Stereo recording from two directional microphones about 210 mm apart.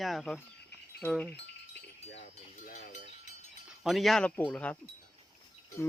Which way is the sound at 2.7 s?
35° left (ahead or behind).